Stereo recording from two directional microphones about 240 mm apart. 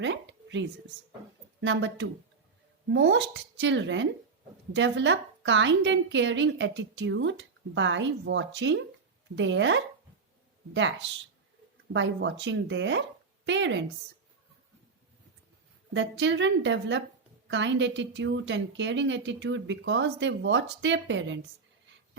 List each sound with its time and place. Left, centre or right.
0.0 s a sound: right
1.6 s a woman's voice: right
11.9 s a woman's voice: right
15.9 s a woman's voice: right